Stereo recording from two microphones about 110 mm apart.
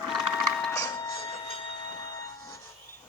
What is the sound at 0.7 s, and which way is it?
Music, 35° left (ahead or behind).